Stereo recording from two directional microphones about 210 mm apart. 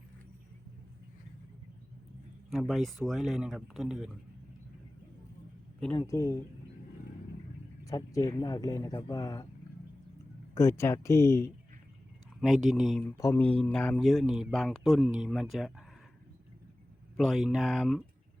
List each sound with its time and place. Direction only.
2.5 s speech: centre (ahead or behind)
6.0 s speech: 15° left (ahead or behind)
7.9 s speech: 15° left (ahead or behind)
10.5 s speech: 15° left (ahead or behind)
12.4 s speech: centre (ahead or behind)
13.1 s speech: 10° left (ahead or behind)
17.2 s speech: centre (ahead or behind)